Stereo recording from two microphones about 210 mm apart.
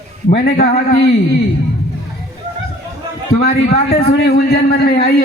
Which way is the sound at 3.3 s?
50° left (ahead or behind).